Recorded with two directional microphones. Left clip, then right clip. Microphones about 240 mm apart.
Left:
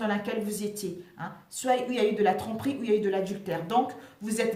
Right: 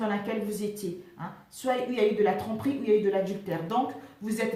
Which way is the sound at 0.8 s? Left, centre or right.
Left.